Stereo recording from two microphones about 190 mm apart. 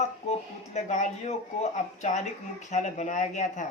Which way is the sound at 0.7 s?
35° left (ahead or behind).